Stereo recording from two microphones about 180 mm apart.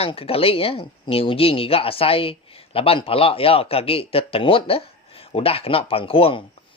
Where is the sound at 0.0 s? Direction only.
30° left (ahead or behind).